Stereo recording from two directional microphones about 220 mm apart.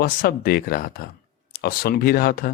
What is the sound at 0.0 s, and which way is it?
Speech, 40° left (ahead or behind).